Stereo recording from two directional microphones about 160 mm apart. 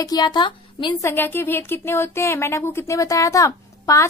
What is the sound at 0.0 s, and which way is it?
Speech, 25° left (ahead or behind).